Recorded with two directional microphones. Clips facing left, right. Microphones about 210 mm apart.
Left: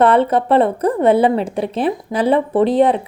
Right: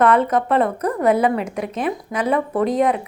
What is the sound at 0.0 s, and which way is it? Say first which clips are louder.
A woman's voice: left 3 dB; 30° left (ahead or behind).